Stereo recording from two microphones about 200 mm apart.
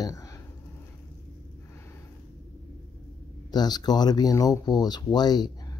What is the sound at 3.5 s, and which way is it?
Speech, 20° left (ahead or behind).